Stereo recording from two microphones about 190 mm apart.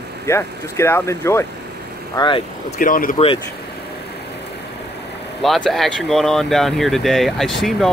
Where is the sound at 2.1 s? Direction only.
25° left (ahead or behind).